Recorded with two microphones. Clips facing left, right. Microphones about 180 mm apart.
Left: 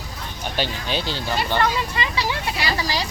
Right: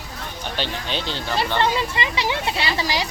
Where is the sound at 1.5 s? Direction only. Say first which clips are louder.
Right 1 dB; 20° right (ahead or behind).